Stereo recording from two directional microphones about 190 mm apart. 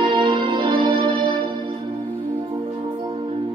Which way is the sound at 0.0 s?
25° right (ahead or behind).